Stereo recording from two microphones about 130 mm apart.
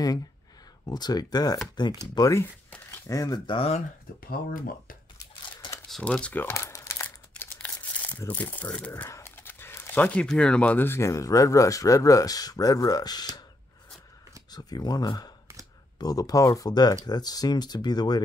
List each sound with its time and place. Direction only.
0.8 s speech: 30° left (ahead or behind)
3.5 s speech: 50° left (ahead or behind)
5.2 s a sound: 30° left (ahead or behind)
5.9 s crumpling: 5° left (ahead or behind)
8.3 s speech: 10° left (ahead or behind); by 13.3 s 30° left (ahead or behind)
14.5 s speech: 30° left (ahead or behind)